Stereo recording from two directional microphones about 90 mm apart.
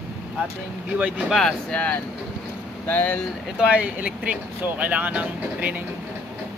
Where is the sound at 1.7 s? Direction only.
15° left (ahead or behind).